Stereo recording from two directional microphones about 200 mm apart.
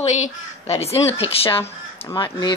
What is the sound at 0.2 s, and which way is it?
Speech, 30° left (ahead or behind).